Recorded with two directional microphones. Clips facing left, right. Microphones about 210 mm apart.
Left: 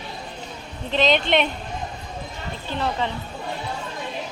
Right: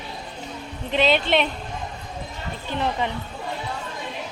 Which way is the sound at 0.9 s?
10° right (ahead or behind).